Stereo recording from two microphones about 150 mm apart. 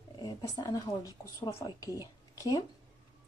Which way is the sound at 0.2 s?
25° left (ahead or behind).